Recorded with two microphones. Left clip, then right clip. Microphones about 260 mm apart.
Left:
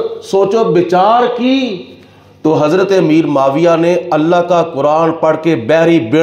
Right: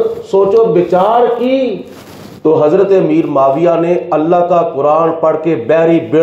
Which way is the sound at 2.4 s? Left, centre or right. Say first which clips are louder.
Right 2 dB; left.